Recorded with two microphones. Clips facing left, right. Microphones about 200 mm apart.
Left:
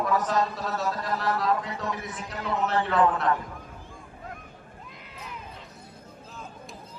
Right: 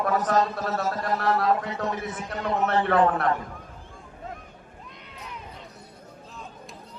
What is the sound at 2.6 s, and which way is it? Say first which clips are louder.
Speech: right 2 dB; 60° right (ahead or behind).